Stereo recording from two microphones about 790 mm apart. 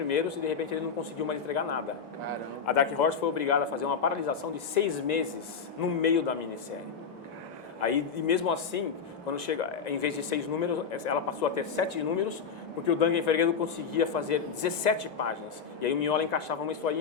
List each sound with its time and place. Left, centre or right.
0.1 s a man's voice: left
7.8 s a man's voice: left
12.9 s a man's voice: left